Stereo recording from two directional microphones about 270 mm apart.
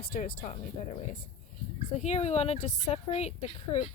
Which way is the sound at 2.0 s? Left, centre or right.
Left.